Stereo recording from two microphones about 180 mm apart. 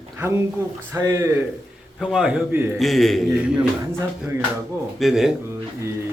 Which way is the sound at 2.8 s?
Centre (ahead or behind).